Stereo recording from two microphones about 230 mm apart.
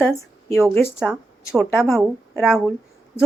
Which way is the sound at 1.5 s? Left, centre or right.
Centre.